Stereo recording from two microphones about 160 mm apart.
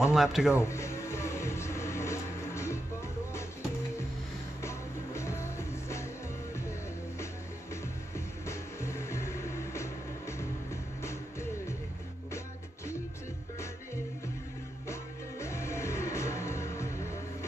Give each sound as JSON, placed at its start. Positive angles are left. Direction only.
{"t": 0.0, "sound": "speech", "side_deg": -5}
{"t": 0.6, "sound": "music", "side_deg": 15}
{"t": 4.6, "sound": "music", "side_deg": 15}
{"t": 8.5, "sound": "music", "side_deg": 15}
{"t": 14.9, "sound": "music", "side_deg": 15}